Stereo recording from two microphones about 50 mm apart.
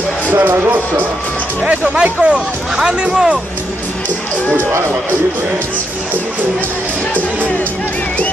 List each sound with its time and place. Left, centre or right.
0.3 s speech: right
1.7 s speech: centre